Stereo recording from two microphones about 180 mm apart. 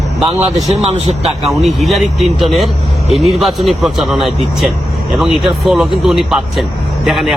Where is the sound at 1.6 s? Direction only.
Centre (ahead or behind).